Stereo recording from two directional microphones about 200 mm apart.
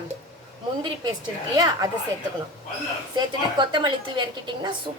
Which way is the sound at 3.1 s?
25° right (ahead or behind).